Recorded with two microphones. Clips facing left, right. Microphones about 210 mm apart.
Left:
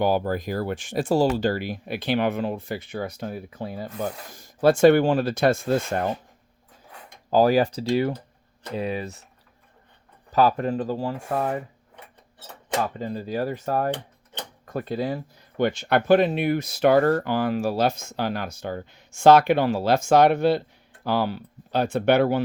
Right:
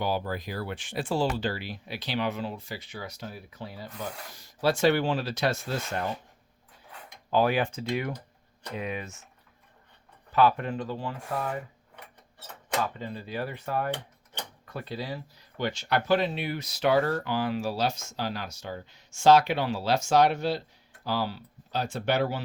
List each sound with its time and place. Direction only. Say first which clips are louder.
0.0 s speech: left 7 dB; 50° left (ahead or behind)
7.3 s speech: left 6 dB; 40° left (ahead or behind)
10.3 s speech: left 3 dB; 40° left (ahead or behind)
12.8 s speech: left 5 dB; 40° left (ahead or behind); by 22.4 s 60° left (ahead or behind)